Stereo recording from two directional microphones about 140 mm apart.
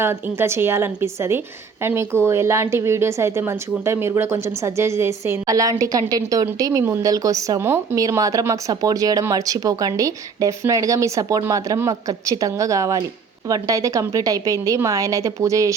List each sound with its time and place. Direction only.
0.0 s a woman's voice: 15° right (ahead or behind)